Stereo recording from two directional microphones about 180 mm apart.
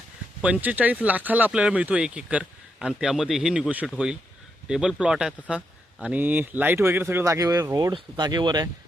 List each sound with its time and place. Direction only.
0.4 s speech: 5° right (ahead or behind); by 8.7 s 25° right (ahead or behind)